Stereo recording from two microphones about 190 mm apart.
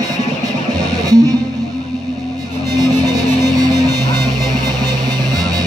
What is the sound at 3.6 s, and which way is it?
Music, 20° right (ahead or behind).